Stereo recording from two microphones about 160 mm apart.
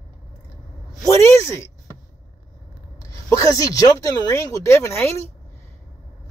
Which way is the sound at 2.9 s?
20° left (ahead or behind).